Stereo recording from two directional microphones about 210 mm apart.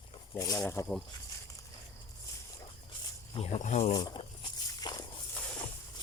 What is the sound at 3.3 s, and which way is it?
Speech, 35° left (ahead or behind).